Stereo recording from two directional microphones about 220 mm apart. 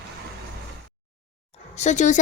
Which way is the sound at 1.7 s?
30° left (ahead or behind).